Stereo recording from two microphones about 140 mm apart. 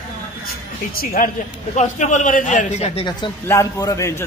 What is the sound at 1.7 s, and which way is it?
Speech, 60° left (ahead or behind).